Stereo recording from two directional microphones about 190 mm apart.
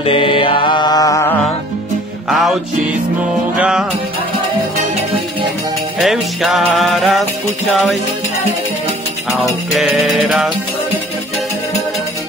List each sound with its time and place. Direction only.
0.0 s mantra: 30° left (ahead or behind)
2.2 s music: centre (ahead or behind)
3.5 s music: 5° right (ahead or behind)
5.9 s music: centre (ahead or behind)
9.8 s music: centre (ahead or behind)